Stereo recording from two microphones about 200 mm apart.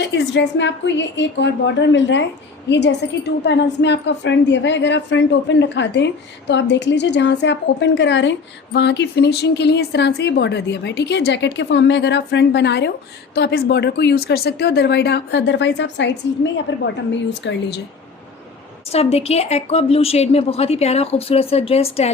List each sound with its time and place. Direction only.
0.0 s a woman's voice: 60° left (ahead or behind)
18.9 s a woman's voice: 30° left (ahead or behind)